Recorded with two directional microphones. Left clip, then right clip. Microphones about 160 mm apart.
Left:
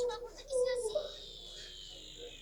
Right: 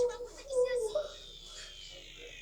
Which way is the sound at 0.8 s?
Centre (ahead or behind).